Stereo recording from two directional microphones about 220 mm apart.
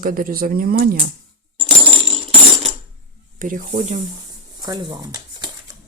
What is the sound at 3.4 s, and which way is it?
Speech, 35° right (ahead or behind).